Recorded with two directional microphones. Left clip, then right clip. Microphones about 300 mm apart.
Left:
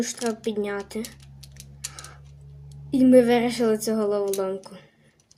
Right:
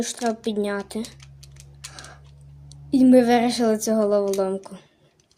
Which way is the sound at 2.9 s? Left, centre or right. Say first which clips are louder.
Right 1 dB; right.